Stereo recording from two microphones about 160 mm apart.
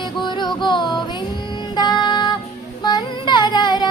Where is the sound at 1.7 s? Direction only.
25° left (ahead or behind).